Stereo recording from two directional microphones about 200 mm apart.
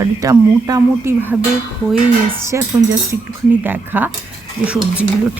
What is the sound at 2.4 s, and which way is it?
Speech, 15° right (ahead or behind).